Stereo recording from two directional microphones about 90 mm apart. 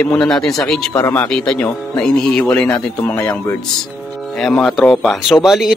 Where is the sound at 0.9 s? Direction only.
25° left (ahead or behind).